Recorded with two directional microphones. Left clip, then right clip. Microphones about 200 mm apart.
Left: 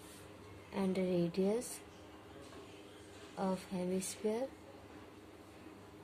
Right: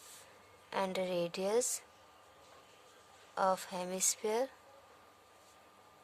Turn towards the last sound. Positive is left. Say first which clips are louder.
# right 4 dB
turn(degrees=-55)  # may be behind; listen again after turning